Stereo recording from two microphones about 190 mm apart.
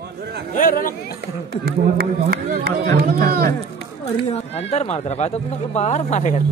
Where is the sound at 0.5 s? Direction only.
45° left (ahead or behind).